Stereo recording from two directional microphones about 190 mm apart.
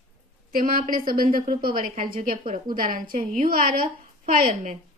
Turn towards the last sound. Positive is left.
turn(degrees=-45)  # may be behind; listen again after turning